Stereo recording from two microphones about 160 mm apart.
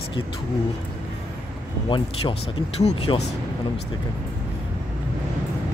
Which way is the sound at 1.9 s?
30° left (ahead or behind).